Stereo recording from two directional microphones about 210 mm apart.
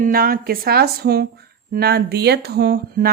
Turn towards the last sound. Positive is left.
turn(degrees=-50)  # may be behind; listen again after turning